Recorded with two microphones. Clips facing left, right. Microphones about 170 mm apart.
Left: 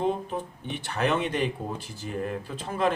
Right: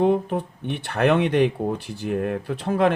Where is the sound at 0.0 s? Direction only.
65° right (ahead or behind).